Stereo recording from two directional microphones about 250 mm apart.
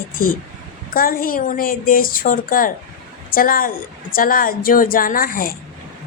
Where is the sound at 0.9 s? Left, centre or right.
Left.